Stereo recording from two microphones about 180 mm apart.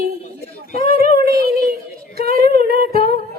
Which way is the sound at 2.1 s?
55° right (ahead or behind).